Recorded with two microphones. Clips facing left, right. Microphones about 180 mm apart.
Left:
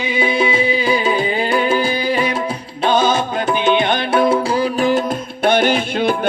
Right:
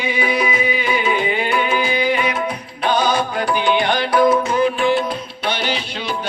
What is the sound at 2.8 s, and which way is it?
Music, 25° left (ahead or behind).